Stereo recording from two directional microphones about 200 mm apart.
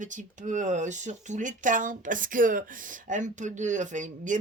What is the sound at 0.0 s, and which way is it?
Speech, 40° right (ahead or behind).